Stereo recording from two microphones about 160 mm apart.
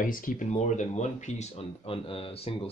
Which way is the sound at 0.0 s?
60° left (ahead or behind).